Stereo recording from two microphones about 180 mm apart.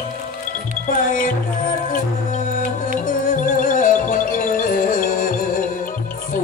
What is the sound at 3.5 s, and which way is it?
Music, 45° left (ahead or behind).